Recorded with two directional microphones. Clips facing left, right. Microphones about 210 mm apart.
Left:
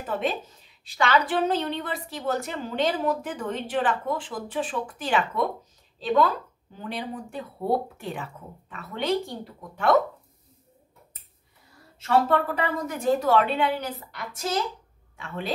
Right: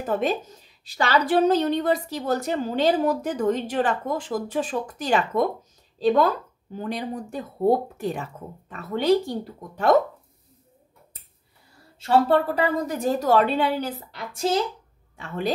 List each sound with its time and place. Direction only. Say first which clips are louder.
0.0 s a woman's voice: right 4 dB; 45° right (ahead or behind)
12.0 s a woman's voice: right 3 dB; 30° right (ahead or behind)
15.1 s a woman's voice: right 6 dB; 40° right (ahead or behind)